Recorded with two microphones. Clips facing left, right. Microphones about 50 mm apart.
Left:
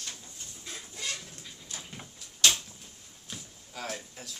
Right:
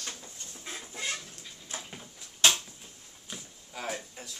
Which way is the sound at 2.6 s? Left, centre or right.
Centre.